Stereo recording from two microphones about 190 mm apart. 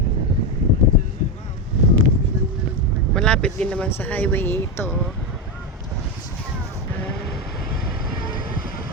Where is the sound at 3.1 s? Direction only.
5° left (ahead or behind).